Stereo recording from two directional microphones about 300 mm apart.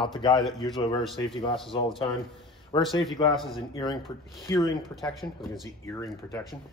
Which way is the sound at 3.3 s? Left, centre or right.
Centre.